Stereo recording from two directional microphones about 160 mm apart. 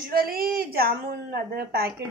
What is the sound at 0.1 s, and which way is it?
Speech, 70° right (ahead or behind).